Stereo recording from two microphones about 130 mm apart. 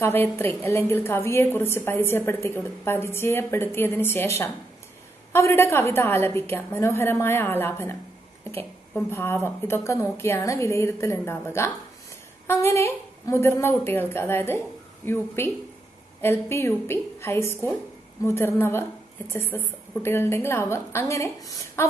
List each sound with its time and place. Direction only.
0.0 s a woman's voice: 15° left (ahead or behind)